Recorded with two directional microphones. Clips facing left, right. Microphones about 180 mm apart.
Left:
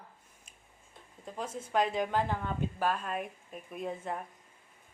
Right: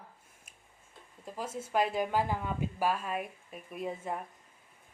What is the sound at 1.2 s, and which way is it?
Speech, 5° right (ahead or behind).